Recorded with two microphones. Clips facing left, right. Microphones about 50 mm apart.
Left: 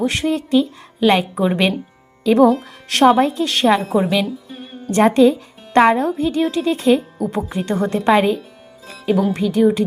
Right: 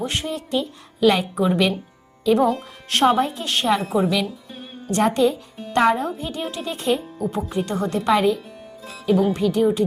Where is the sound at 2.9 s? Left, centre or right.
Left.